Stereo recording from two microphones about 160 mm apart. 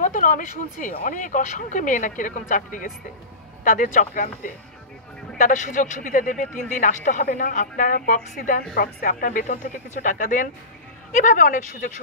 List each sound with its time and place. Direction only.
0.0 s a woman's voice: 55° left (ahead or behind)